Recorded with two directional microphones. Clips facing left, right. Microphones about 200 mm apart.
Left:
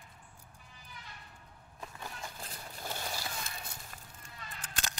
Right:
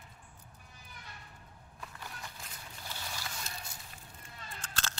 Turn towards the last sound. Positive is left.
turn(degrees=15)  # may be behind; listen again after turning